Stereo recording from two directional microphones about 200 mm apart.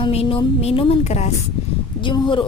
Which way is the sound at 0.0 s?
30° left (ahead or behind).